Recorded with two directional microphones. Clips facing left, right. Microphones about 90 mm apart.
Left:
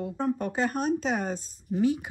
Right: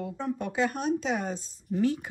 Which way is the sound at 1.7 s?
15° left (ahead or behind).